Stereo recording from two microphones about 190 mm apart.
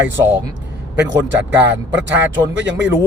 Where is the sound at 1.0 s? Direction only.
70° right (ahead or behind).